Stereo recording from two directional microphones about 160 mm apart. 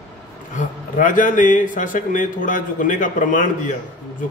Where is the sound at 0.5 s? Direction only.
55° left (ahead or behind).